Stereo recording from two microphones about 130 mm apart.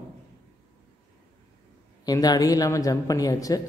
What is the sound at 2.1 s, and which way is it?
Speech, 30° left (ahead or behind).